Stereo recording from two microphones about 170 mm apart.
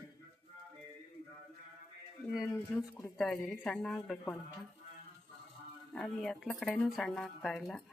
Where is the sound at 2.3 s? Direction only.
Centre (ahead or behind).